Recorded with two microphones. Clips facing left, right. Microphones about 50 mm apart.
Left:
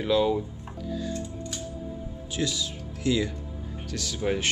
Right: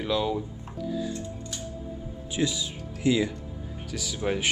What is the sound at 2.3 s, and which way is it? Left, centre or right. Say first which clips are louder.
Speech: right 2 dB; centre.